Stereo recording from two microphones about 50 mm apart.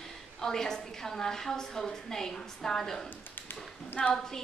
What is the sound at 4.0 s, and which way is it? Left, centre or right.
Speech, centre.